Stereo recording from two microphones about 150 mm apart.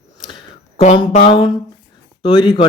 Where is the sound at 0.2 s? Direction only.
30° left (ahead or behind).